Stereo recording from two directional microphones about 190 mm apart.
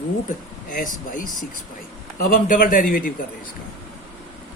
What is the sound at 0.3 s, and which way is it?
Speech, 45° left (ahead or behind).